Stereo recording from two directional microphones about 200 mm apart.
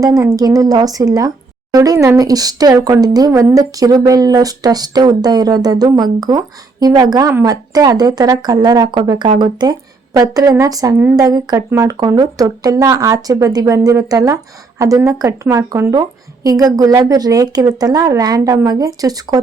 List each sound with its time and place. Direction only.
0.0 s a woman's voice: 15° right (ahead or behind)